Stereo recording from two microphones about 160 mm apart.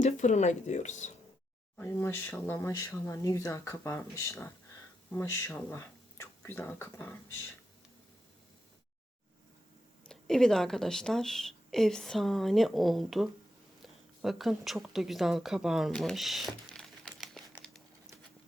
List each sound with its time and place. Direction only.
0.0 s speech: 50° left (ahead or behind)
1.8 s speech: 15° left (ahead or behind)
10.1 s a woman's voice: 5° left (ahead or behind)
13.8 s a sound: centre (ahead or behind)